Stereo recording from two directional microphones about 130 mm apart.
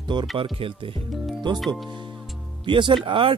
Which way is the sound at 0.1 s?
35° right (ahead or behind).